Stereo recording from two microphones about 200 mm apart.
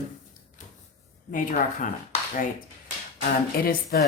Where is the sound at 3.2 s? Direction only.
50° left (ahead or behind).